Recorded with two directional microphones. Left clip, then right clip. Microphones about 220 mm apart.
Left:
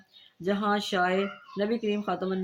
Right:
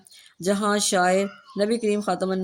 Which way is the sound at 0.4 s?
55° right (ahead or behind).